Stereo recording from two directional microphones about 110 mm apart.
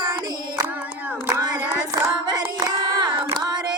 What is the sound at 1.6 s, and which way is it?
Hands, 15° right (ahead or behind).